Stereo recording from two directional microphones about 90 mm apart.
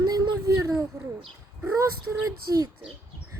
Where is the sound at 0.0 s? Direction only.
50° right (ahead or behind).